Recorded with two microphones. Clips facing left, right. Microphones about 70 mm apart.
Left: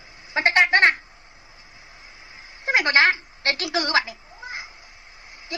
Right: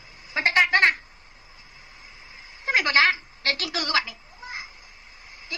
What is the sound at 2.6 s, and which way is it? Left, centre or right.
A woman's voice, left.